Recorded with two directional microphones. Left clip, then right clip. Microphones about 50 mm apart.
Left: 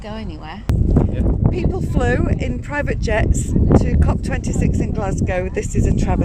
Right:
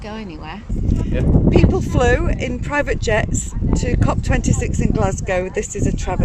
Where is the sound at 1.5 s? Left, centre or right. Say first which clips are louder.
Right 6 dB; centre.